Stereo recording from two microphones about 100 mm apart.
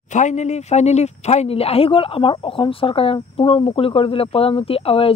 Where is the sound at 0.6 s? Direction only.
90° left.